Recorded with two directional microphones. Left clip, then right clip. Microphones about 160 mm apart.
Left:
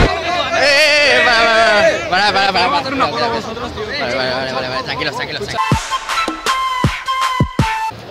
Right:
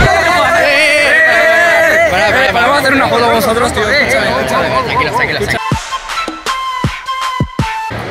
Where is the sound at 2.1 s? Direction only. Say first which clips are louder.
Right 3 dB; 50° left (ahead or behind).